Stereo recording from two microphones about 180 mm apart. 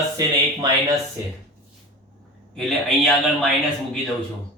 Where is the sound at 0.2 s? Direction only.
20° right (ahead or behind).